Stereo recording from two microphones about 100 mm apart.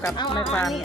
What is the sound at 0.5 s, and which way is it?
Speech, 5° left (ahead or behind).